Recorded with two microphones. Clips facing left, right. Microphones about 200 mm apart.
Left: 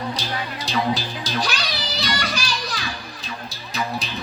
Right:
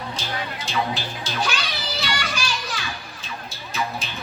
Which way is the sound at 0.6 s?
35° left (ahead or behind).